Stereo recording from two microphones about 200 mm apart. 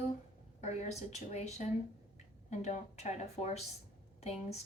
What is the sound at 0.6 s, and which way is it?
Speech, 35° left (ahead or behind).